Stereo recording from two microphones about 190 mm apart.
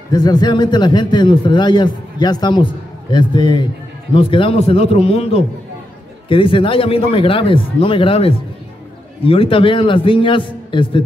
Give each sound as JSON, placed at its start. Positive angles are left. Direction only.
{"t": 0.1, "sound": "a man's voice", "side_deg": 20}